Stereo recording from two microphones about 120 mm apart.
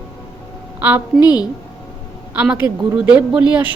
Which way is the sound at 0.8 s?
15° right (ahead or behind).